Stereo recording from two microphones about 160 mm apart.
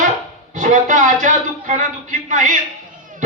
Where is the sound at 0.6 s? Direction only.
50° right (ahead or behind).